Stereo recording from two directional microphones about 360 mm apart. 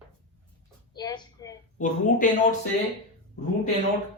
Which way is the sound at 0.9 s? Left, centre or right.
Centre.